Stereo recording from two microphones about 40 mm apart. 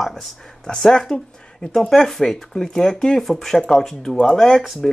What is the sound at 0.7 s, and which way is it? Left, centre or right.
Speech, centre.